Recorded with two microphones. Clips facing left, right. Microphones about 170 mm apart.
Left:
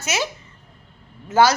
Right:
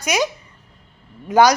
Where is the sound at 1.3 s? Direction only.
15° right (ahead or behind).